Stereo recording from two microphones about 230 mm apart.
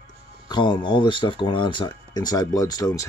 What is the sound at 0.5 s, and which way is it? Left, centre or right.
Speech, left.